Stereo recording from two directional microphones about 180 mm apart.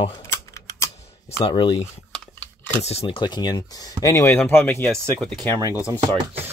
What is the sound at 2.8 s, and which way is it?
Speech, 35° left (ahead or behind).